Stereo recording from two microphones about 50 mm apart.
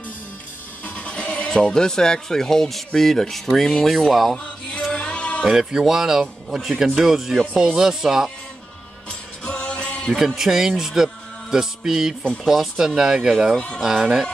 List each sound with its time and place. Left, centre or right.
0.8 s speech: left; by 4.4 s centre
4.9 s music: left
5.4 s speech: centre
9.4 s music: left
10.1 s speech: centre